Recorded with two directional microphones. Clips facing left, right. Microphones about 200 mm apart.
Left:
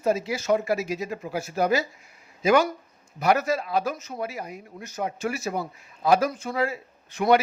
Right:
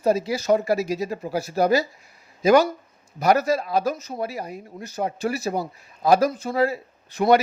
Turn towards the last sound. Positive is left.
turn(degrees=-35)  # may be behind; listen again after turning